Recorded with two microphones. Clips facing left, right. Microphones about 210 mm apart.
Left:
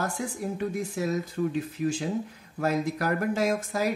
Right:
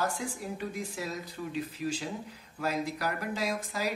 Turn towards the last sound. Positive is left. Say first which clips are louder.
# left 6 dB
turn(degrees=50)  # may be behind; listen again after turning